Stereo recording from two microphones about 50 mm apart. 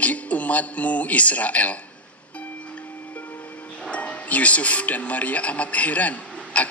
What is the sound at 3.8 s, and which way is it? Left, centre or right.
A man's voice, left.